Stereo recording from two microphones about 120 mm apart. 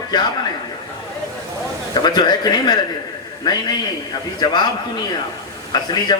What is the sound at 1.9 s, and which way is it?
A man's voice, 35° left (ahead or behind).